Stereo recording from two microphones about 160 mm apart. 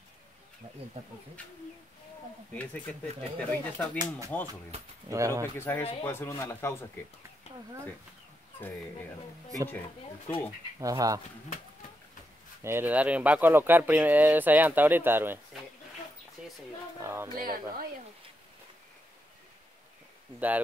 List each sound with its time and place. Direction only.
1.0 s speech: 40° right (ahead or behind)
2.5 s speech: 10° left (ahead or behind)
5.1 s speech: 20° right (ahead or behind)
5.6 s speech: 15° left (ahead or behind)
7.5 s a sound: 40° left (ahead or behind)
9.7 s speech: 10° left (ahead or behind)
10.8 s speech: 20° right (ahead or behind)
12.6 s speech: 15° right (ahead or behind)
16.4 s a sound: 5° right (ahead or behind)
17.0 s speech: 15° right (ahead or behind)
17.4 s speech: 65° right (ahead or behind)
20.3 s speech: 10° right (ahead or behind)